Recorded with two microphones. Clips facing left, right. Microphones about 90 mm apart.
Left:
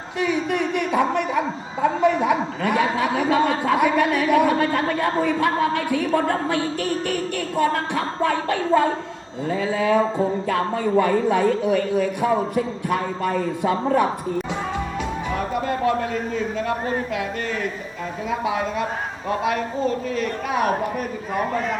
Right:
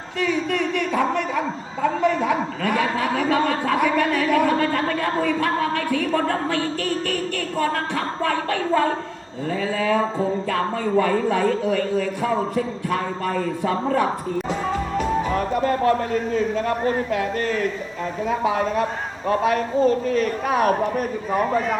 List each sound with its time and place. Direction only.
0.2 s speech: 15° left (ahead or behind)
10.0 s music: 5° left (ahead or behind)
10.5 s speech: 20° left (ahead or behind)
14.9 s music: 40° right (ahead or behind)
16.3 s a man's voice: 40° right (ahead or behind)